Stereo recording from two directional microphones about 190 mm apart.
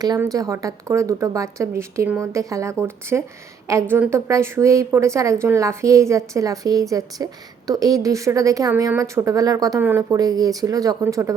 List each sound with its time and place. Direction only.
0.0 s a woman's voice: 20° right (ahead or behind)